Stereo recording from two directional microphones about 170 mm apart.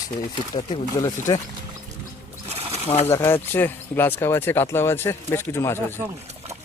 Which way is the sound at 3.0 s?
15° left (ahead or behind).